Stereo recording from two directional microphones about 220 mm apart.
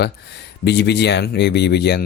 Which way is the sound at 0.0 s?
50° left (ahead or behind).